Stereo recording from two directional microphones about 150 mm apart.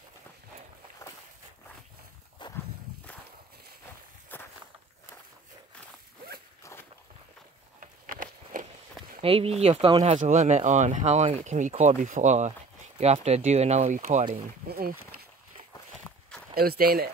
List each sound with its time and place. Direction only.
2.4 s walk: 30° left (ahead or behind)
4.3 s walk: 15° left (ahead or behind)
6.2 s zipper: 90° right
6.6 s walk: 15° left (ahead or behind)
7.8 s a sound: 65° right (ahead or behind)
9.2 s speech: 40° right (ahead or behind)
10.0 s speech: 50° right (ahead or behind)
14.7 s speech: 80° right
16.0 s walk: 5° left (ahead or behind)
16.5 s speech: 90° right